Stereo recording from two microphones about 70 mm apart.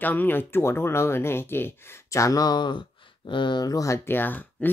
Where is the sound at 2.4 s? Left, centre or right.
Left.